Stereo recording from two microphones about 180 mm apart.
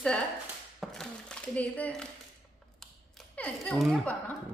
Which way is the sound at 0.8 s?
5° left (ahead or behind).